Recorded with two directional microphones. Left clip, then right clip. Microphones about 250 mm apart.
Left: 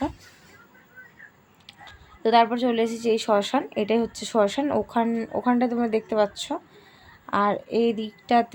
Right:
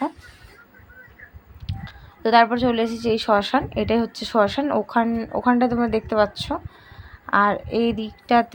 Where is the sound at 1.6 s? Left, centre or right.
Centre.